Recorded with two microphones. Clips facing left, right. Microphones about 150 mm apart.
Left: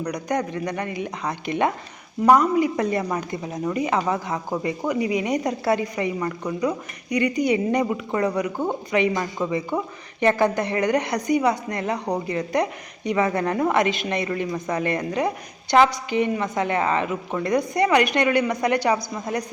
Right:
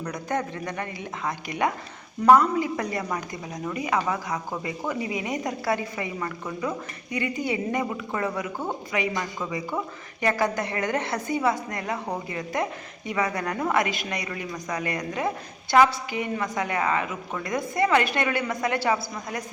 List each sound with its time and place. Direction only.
0.0 s a woman's voice: 15° left (ahead or behind)